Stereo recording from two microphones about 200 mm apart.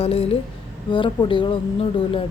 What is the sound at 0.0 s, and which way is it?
A woman's voice, 30° left (ahead or behind).